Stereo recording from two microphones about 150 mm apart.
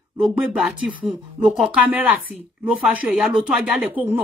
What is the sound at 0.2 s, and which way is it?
A woman's voice, 5° right (ahead or behind).